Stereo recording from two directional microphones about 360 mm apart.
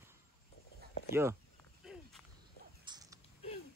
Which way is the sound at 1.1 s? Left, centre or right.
Centre.